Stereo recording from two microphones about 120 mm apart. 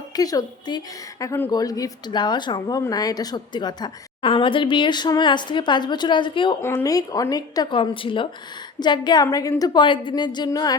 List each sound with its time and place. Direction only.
0.2 s speech: 30° left (ahead or behind)
4.2 s speech: 45° left (ahead or behind)
6.8 s speech: 30° left (ahead or behind)
7.8 s a woman's voice: 45° left (ahead or behind)